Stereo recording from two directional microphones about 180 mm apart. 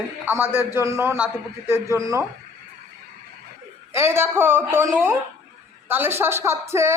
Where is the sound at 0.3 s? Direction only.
10° right (ahead or behind).